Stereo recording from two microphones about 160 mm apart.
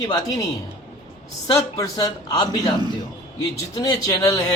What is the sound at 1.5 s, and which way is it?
Speech, 20° left (ahead or behind).